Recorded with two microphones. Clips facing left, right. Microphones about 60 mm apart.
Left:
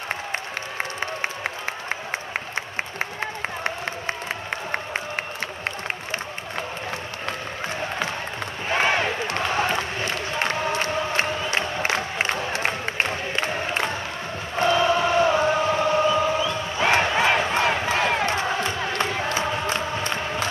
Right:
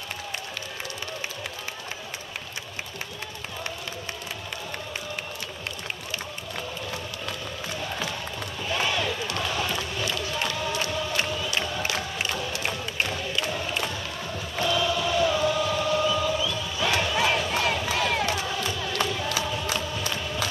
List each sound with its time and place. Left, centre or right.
0.3 s applause: left
3.2 s a sound: left
4.5 s crowd: left
7.8 s music: left
8.6 s a sound: left
14.6 s chant: left